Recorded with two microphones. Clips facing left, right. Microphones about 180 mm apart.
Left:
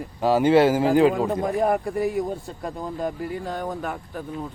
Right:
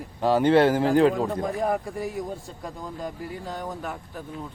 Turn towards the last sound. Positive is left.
turn(degrees=55)  # may be behind; listen again after turning